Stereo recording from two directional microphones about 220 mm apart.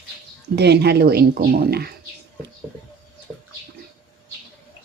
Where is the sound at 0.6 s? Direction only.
50° right (ahead or behind).